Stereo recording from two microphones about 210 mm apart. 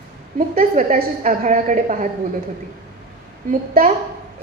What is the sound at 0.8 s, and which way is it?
A woman's voice, 40° right (ahead or behind).